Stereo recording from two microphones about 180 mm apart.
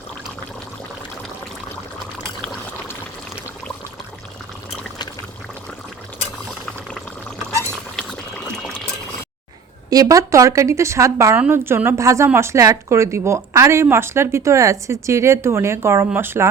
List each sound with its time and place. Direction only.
9.9 s a woman's voice: 20° right (ahead or behind)